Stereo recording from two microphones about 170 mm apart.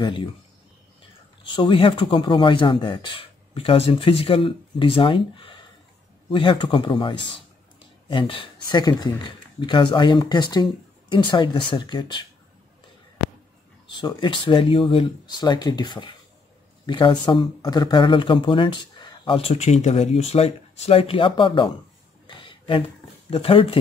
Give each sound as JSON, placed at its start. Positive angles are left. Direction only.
{"t": 0.0, "sound": "speech", "side_deg": 30}
{"t": 1.4, "sound": "speech", "side_deg": 30}
{"t": 13.8, "sound": "speech", "side_deg": 25}
{"t": 22.2, "sound": "a sound", "side_deg": 30}
{"t": 23.3, "sound": "speech", "side_deg": 35}